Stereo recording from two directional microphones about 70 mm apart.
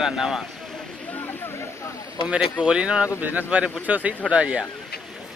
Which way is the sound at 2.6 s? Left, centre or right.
Centre.